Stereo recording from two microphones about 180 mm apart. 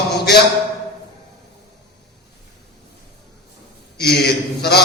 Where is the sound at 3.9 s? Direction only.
65° left (ahead or behind).